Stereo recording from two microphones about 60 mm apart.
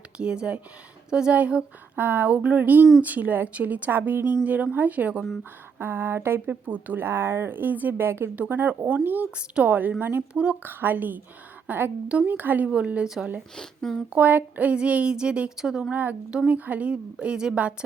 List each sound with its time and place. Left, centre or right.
0.2 s a woman's voice: centre
2.0 s a woman's voice: right
5.4 s speech: right
7.1 s a woman's voice: right
10.3 s a woman's voice: centre
10.6 s a woman's voice: right; by 13.1 s centre
13.6 s speech: centre
14.1 s a woman's voice: right; by 15.9 s centre
15.9 s a woman's voice: right